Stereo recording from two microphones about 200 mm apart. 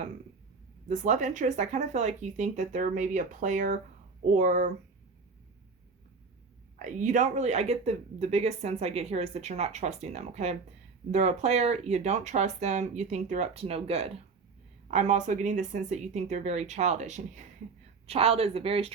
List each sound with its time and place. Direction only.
0.9 s speech: 40° right (ahead or behind)
6.7 s speech: 40° right (ahead or behind)